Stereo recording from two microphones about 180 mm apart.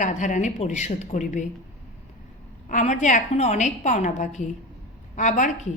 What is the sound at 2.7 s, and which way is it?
A woman's voice, 45° left (ahead or behind).